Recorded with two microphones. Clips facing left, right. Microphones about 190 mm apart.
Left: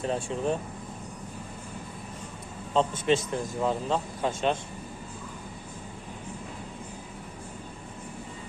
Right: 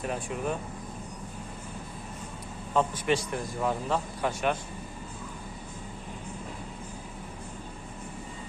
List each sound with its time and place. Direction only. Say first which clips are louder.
0.0 s a man's voice: left 3 dB; 25° left (ahead or behind)
2.7 s a man's voice: left 2 dB; 25° left (ahead or behind)